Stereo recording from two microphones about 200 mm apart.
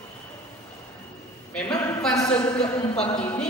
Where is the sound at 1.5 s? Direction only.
5° left (ahead or behind).